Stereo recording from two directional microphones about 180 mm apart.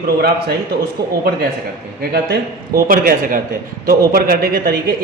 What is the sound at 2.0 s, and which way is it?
A man's voice, 55° right (ahead or behind).